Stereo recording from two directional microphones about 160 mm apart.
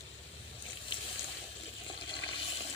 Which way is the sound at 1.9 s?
30° left (ahead or behind).